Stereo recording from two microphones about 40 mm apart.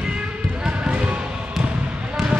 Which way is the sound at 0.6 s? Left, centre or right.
Right.